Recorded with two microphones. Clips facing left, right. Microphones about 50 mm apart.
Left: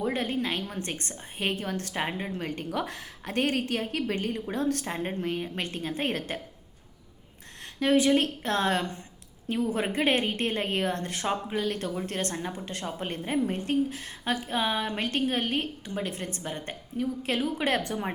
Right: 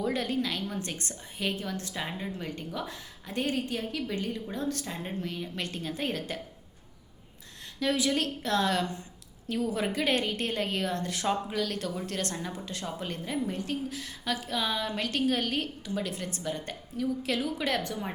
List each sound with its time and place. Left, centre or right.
0.0 s a woman's voice: left
7.6 s a woman's voice: left
11.3 s a woman's voice: left